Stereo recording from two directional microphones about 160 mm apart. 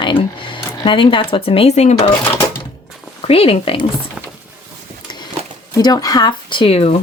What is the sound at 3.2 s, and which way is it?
Speech, 35° left (ahead or behind).